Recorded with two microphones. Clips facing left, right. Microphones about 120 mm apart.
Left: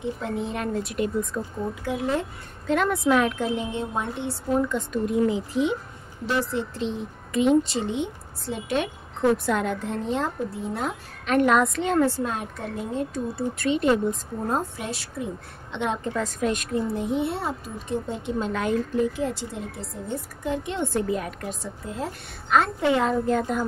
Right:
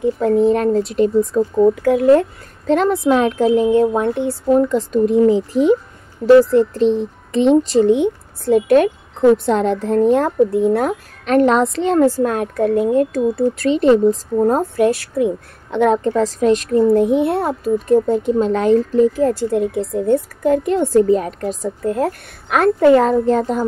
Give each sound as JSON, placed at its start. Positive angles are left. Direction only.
{"t": 0.0, "sound": "a woman's voice", "side_deg": -40}
{"t": 1.6, "sound": "a woman's voice", "side_deg": -55}
{"t": 2.6, "sound": "a woman's voice", "side_deg": -35}
{"t": 3.8, "sound": "a child's voice", "side_deg": -60}
{"t": 7.9, "sound": "a child's voice", "side_deg": -55}
{"t": 9.5, "sound": "a child's voice", "side_deg": -35}
{"t": 11.2, "sound": "a woman's voice", "side_deg": -35}
{"t": 12.2, "sound": "a woman's voice", "side_deg": -55}
{"t": 13.4, "sound": "a woman's voice", "side_deg": -35}
{"t": 14.5, "sound": "a child's voice", "side_deg": -55}
{"t": 16.9, "sound": "a child's voice", "side_deg": -55}
{"t": 19.6, "sound": "a woman's voice", "side_deg": -55}
{"t": 21.8, "sound": "a child's voice", "side_deg": -55}